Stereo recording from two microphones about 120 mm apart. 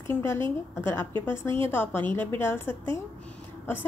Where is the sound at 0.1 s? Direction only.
20° left (ahead or behind).